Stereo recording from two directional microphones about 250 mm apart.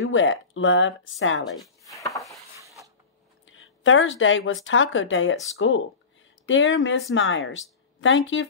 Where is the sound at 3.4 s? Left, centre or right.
Left.